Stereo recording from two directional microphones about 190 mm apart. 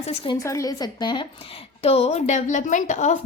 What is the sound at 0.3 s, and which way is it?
A woman's voice, 15° left (ahead or behind).